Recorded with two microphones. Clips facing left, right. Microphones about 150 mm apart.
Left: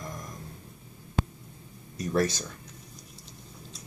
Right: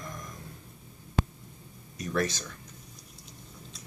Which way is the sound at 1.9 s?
35° left (ahead or behind).